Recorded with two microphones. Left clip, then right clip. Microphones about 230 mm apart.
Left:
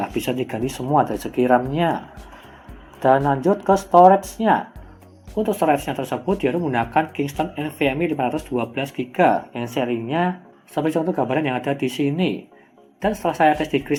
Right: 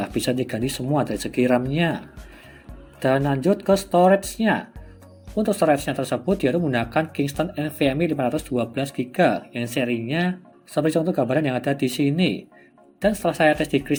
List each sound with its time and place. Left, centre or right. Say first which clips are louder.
0.0 s speech: even; right
3.2 s speech: left 2 dB; right